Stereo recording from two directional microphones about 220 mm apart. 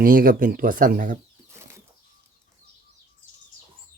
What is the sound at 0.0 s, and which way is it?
Speech, 40° right (ahead or behind).